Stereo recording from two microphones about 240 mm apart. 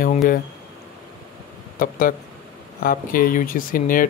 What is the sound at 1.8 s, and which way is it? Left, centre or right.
Speech, left.